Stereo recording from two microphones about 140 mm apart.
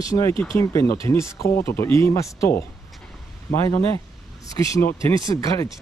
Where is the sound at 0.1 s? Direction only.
30° left (ahead or behind).